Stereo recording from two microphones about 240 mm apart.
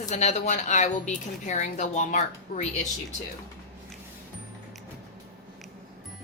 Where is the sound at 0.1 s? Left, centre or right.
Left.